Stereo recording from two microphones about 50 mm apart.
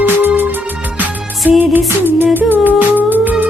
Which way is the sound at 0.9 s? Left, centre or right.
Right.